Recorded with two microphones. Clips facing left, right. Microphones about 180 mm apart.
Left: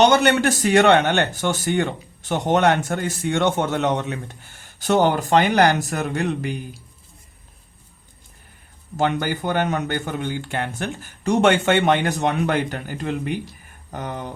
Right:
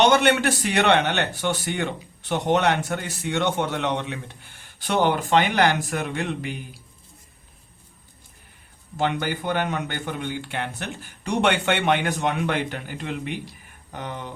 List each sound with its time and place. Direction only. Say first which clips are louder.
0.0 s speech: left 2 dB; 40° left (ahead or behind)
9.0 s speech: left 3 dB; 45° left (ahead or behind)